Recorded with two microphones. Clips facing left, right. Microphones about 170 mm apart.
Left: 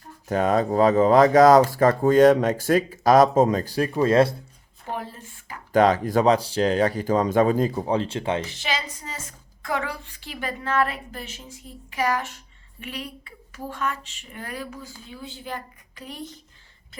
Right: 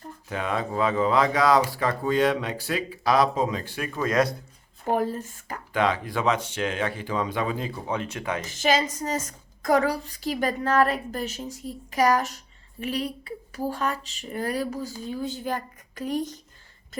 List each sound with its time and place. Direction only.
0.3 s speech: 40° left (ahead or behind)
4.9 s speech: 45° right (ahead or behind)
5.7 s speech: 40° left (ahead or behind)
8.4 s a woman's voice: 45° right (ahead or behind)